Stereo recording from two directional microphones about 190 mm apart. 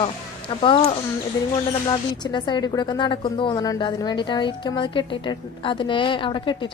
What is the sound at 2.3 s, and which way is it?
A woman's voice, 25° left (ahead or behind).